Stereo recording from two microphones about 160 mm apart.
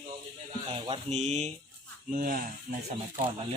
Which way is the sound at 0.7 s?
35° right (ahead or behind).